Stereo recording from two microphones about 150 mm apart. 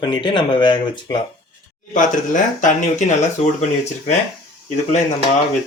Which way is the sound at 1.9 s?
60° left (ahead or behind).